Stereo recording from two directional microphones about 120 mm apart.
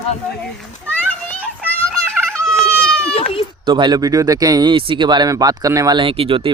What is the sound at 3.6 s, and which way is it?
Speech, 40° right (ahead or behind).